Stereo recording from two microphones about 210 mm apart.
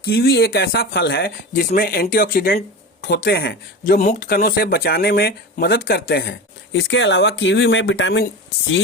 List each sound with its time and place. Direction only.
0.0 s speech: 50° left (ahead or behind)
6.8 s speech: 60° left (ahead or behind)